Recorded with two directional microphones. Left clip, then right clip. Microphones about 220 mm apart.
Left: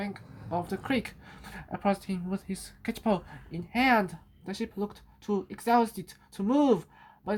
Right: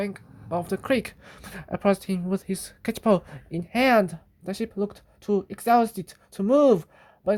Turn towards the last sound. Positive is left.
turn(degrees=-45)  # may be behind; listen again after turning